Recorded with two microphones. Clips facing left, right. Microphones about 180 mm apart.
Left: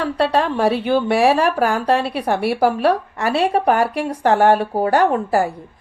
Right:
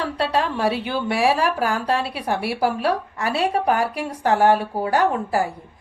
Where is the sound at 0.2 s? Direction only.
45° left (ahead or behind).